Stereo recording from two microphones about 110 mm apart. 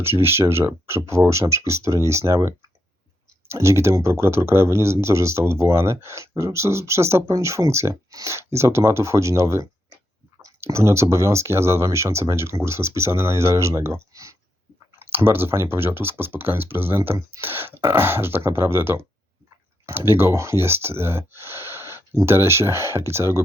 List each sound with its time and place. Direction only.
0.0 s speech: 20° right (ahead or behind)
3.5 s speech: 25° right (ahead or behind)